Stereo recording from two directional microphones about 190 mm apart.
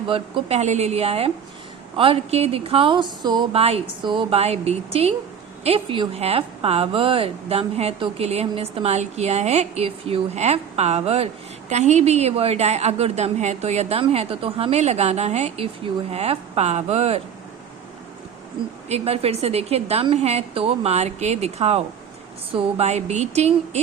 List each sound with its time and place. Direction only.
0.1 s a woman's voice: 30° right (ahead or behind)
18.9 s a woman's voice: 35° right (ahead or behind)